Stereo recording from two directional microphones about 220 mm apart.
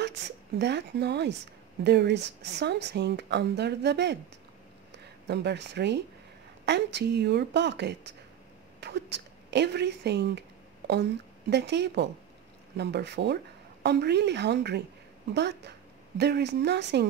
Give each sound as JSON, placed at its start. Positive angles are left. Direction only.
{"t": 0.0, "sound": "a woman's voice", "side_deg": -50}
{"t": 11.5, "sound": "a woman's voice", "side_deg": -50}